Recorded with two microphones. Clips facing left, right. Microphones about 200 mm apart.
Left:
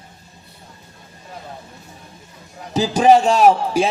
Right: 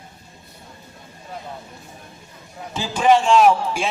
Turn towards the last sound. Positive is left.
turn(degrees=40)  # may be behind; listen again after turning